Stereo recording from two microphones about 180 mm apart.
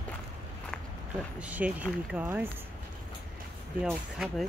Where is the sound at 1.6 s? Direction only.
5° right (ahead or behind).